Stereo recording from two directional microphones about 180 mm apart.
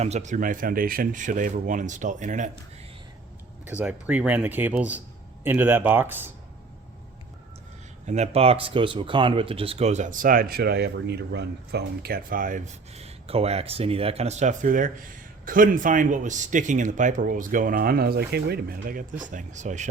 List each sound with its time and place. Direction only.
0.0 s speech: 40° right (ahead or behind)
3.7 s speech: 10° right (ahead or behind)
8.0 s speech: 40° right (ahead or behind)